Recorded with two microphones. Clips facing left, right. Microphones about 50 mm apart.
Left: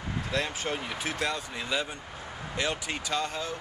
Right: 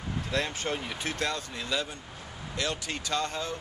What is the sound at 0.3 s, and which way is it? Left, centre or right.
Speech, centre.